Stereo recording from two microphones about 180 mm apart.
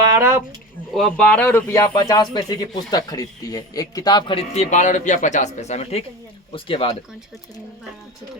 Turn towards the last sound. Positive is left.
turn(degrees=30)  # may be behind; listen again after turning